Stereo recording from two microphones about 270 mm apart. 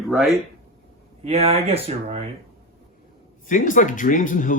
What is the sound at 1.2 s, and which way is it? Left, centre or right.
Speech, right.